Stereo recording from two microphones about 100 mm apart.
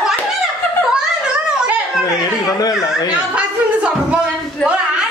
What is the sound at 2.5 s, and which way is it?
Speech, 40° left (ahead or behind).